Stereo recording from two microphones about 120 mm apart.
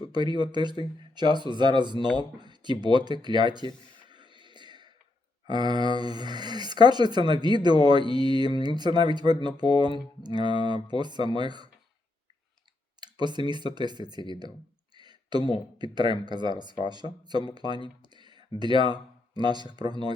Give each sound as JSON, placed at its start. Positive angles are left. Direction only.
{"t": 0.1, "sound": "speech", "side_deg": -40}
{"t": 3.9, "sound": "a sound", "side_deg": -40}
{"t": 5.5, "sound": "speech", "side_deg": -35}
{"t": 13.0, "sound": "tick", "side_deg": -40}
{"t": 13.5, "sound": "speech", "side_deg": -40}
{"t": 14.9, "sound": "a sound", "side_deg": -40}
{"t": 15.8, "sound": "speech", "side_deg": -40}
{"t": 18.0, "sound": "a sound", "side_deg": -40}
{"t": 18.6, "sound": "speech", "side_deg": -40}